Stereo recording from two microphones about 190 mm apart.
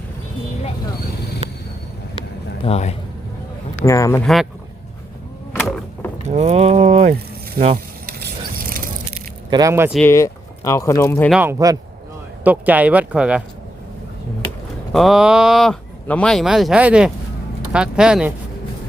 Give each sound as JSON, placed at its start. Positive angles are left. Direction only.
{"t": 2.6, "sound": "speech", "side_deg": 35}
{"t": 3.8, "sound": "speech", "side_deg": 15}
{"t": 5.5, "sound": "a sound", "side_deg": 5}
{"t": 6.2, "sound": "a sound", "side_deg": -35}
{"t": 7.6, "sound": "speech", "side_deg": -45}
{"t": 8.0, "sound": "keys jangling", "side_deg": -50}
{"t": 9.5, "sound": "speech", "side_deg": -20}
{"t": 10.1, "sound": "speech", "side_deg": 15}
{"t": 11.3, "sound": "speech", "side_deg": -10}
{"t": 14.9, "sound": "speech", "side_deg": 0}